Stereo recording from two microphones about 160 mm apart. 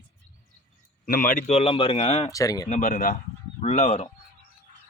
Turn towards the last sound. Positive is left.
turn(degrees=45)  # may be behind; listen again after turning